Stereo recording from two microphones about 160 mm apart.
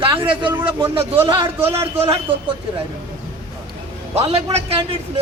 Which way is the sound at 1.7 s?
40° right (ahead or behind).